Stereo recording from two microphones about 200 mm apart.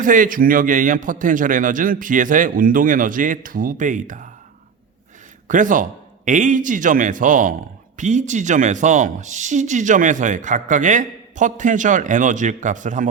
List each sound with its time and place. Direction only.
0.0 s speech: 40° right (ahead or behind)
5.5 s speech: 40° right (ahead or behind)